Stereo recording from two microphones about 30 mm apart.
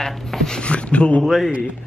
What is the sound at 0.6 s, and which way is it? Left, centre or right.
Speech, left.